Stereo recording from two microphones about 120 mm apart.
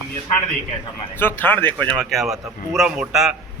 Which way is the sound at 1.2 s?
20° left (ahead or behind).